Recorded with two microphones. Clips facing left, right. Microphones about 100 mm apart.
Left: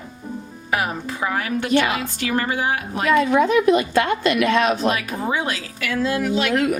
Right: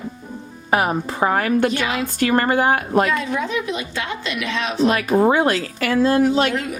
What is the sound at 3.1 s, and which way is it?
A woman's voice, 55° left (ahead or behind).